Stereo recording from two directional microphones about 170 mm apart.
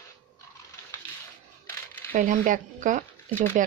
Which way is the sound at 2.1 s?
50° right (ahead or behind).